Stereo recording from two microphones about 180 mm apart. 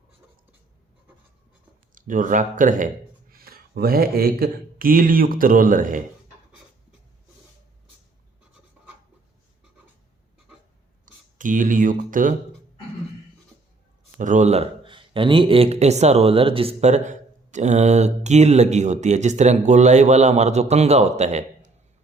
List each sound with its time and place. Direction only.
2.0 s speech: 45° right (ahead or behind)
11.0 s speech: 45° right (ahead or behind)
14.2 s speech: 45° right (ahead or behind)